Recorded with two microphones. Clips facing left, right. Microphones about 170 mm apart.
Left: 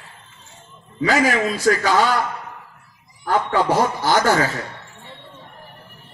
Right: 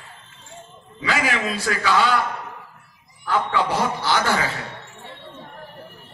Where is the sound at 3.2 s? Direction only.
45° left (ahead or behind).